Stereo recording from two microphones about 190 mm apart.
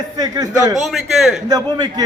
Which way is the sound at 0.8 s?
Centre (ahead or behind).